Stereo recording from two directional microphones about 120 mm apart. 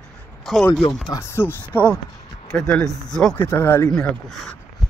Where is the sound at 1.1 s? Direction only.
25° left (ahead or behind).